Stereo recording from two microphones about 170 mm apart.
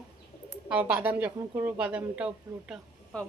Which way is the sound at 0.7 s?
10° right (ahead or behind).